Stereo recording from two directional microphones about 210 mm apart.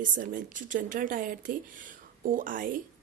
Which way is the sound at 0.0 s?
40° right (ahead or behind).